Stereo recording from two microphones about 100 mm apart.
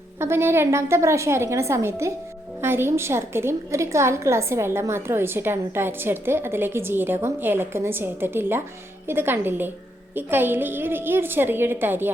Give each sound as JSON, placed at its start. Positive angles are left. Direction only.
{"t": 0.2, "sound": "a woman's voice", "side_deg": -25}